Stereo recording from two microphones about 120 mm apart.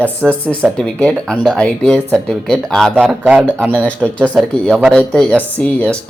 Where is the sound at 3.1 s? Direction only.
10° right (ahead or behind).